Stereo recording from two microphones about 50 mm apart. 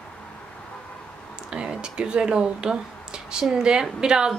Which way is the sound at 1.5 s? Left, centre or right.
Centre.